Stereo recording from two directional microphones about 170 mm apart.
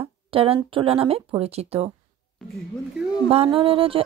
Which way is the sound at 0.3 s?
35° right (ahead or behind).